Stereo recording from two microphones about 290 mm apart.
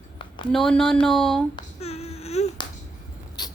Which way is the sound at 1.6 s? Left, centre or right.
Left.